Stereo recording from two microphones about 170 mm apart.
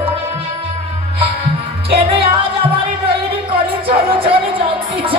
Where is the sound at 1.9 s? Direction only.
35° right (ahead or behind).